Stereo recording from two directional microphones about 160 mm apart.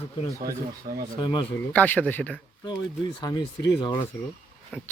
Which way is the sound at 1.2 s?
25° left (ahead or behind).